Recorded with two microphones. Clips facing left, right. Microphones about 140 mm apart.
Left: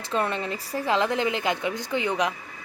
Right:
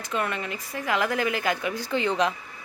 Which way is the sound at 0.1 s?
30° left (ahead or behind).